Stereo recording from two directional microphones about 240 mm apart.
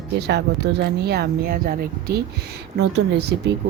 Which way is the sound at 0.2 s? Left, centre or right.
Right.